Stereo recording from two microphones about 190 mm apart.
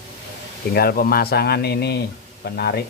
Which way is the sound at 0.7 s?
55° left (ahead or behind).